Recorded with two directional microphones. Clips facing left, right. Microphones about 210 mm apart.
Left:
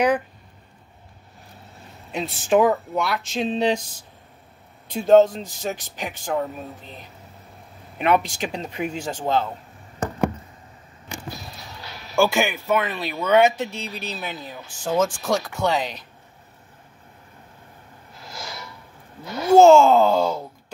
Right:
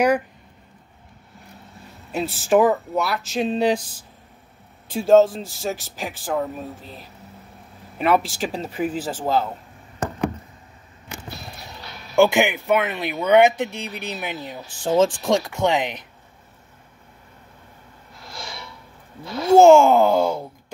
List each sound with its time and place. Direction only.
2.1 s speech: 5° right (ahead or behind)
4.9 s speech: 5° right (ahead or behind)
8.0 s speech: 5° right (ahead or behind)
12.2 s speech: 20° right (ahead or behind)
19.5 s speech: 10° right (ahead or behind)